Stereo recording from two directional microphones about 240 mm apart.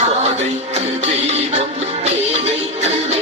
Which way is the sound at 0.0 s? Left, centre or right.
Right.